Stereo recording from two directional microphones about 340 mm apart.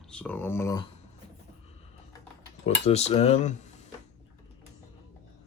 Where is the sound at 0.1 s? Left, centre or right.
Centre.